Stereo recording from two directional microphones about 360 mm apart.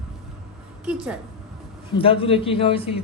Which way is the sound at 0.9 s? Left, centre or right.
Centre.